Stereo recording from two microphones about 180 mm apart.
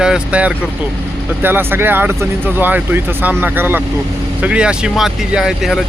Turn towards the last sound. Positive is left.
turn(degrees=-5)  # may be behind; listen again after turning